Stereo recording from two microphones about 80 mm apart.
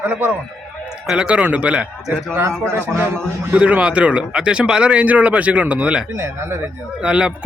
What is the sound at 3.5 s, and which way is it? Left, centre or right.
Speech, centre.